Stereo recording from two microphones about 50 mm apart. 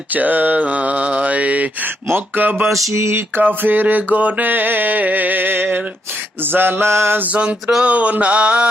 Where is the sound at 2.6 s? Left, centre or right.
Centre.